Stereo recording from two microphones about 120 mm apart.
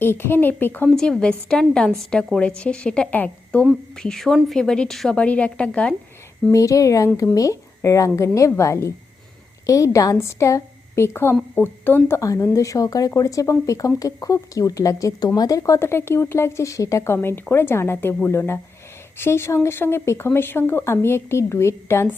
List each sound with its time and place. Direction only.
0.0 s a woman's voice: 20° left (ahead or behind)
0.9 s a woman's voice: 5° left (ahead or behind)
6.5 s speech: 25° left (ahead or behind)